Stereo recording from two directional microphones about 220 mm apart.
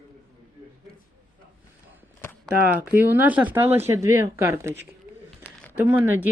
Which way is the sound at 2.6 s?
5° right (ahead or behind).